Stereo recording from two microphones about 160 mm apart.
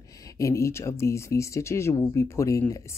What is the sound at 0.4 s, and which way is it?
Speech, 20° left (ahead or behind).